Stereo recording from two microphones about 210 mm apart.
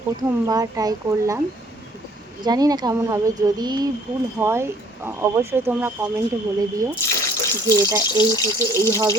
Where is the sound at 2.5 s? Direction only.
20° right (ahead or behind).